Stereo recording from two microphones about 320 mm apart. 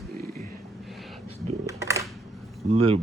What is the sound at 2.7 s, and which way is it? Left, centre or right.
Speech, centre.